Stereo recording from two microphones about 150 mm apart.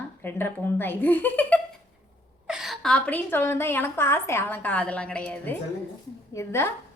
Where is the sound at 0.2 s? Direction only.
15° left (ahead or behind).